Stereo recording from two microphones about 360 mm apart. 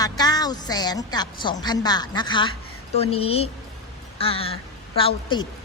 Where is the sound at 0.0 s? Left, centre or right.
Centre.